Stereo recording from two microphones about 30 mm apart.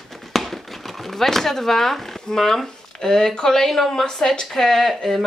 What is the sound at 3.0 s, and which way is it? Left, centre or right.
Speech, centre.